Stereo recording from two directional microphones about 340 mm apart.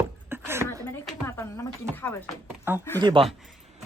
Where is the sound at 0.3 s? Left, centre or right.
Centre.